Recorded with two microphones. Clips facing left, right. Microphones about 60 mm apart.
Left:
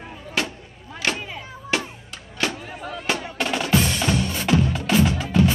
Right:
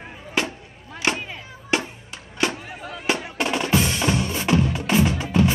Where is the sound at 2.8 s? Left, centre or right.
Centre.